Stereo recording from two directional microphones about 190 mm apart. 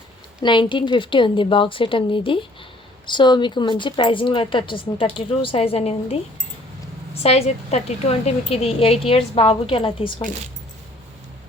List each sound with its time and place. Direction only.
0.4 s a woman's voice: 25° left (ahead or behind)